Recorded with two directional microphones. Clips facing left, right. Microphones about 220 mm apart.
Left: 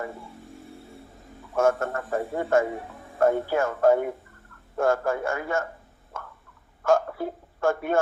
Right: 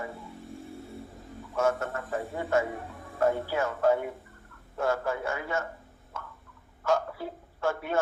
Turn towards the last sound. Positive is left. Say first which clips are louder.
# left 5 dB
turn(degrees=50)  # may be behind; listen again after turning